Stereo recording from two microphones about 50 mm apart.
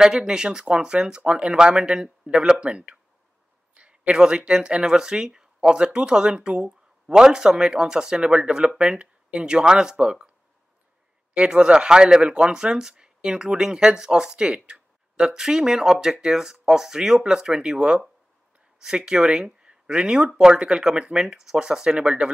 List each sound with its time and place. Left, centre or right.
0.0 s speech: centre
11.3 s speech: centre